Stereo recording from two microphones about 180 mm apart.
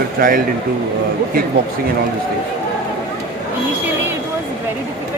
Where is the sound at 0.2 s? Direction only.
50° right (ahead or behind).